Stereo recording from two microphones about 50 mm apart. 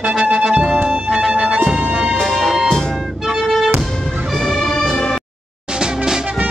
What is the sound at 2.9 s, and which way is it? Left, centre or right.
Music, centre.